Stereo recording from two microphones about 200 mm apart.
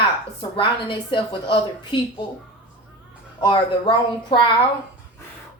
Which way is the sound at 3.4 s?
25° left (ahead or behind).